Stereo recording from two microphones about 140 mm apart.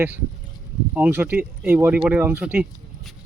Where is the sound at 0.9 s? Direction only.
15° right (ahead or behind).